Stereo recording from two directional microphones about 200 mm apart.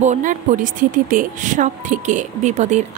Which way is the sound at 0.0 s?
40° right (ahead or behind).